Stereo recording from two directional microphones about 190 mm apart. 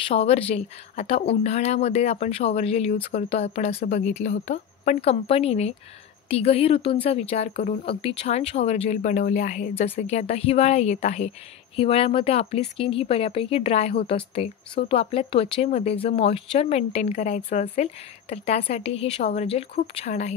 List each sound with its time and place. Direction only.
0.1 s speech: 30° left (ahead or behind)